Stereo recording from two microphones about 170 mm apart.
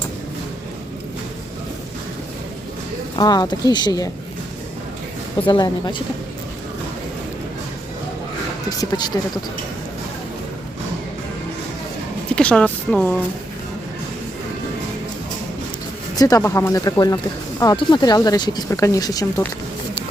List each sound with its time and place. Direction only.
3.2 s speech: 25° left (ahead or behind)
5.5 s speech: 25° left (ahead or behind)
8.8 s speech: 25° left (ahead or behind)
12.4 s speech: 5° left (ahead or behind)
16.1 s speech: 20° left (ahead or behind)